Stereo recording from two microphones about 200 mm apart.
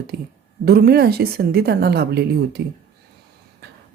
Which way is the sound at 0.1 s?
55° right (ahead or behind).